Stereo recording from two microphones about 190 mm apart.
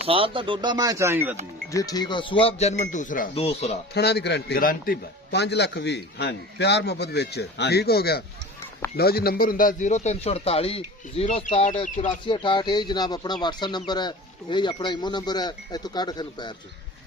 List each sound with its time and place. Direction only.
0.1 s speech: 30° right (ahead or behind); by 1.4 s 10° right (ahead or behind)
1.7 s a man's voice: 20° left (ahead or behind)
3.9 s a man's voice: 60° left (ahead or behind); by 12.1 s 40° left (ahead or behind)
12.3 s speech: 25° left (ahead or behind)